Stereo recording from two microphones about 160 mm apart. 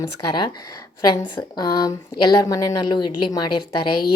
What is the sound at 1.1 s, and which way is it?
A woman's voice, 25° left (ahead or behind).